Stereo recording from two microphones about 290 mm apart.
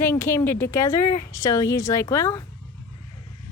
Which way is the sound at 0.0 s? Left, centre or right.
Centre.